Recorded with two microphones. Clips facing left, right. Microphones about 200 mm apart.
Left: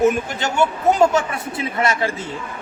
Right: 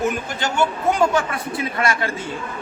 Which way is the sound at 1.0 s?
25° left (ahead or behind).